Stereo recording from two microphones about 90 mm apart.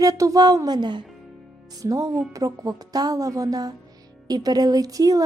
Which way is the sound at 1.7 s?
40° right (ahead or behind).